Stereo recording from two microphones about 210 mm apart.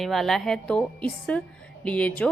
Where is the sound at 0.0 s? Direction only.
Centre (ahead or behind).